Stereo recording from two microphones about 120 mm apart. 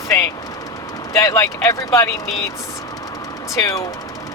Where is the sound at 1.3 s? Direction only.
25° left (ahead or behind).